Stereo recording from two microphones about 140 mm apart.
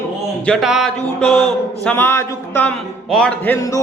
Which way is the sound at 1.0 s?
10° left (ahead or behind).